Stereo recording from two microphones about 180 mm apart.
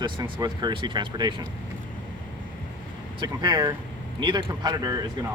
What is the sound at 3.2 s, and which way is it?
Speech, 25° right (ahead or behind).